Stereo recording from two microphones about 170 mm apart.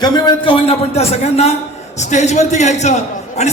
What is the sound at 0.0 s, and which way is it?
A man's voice, 25° left (ahead or behind).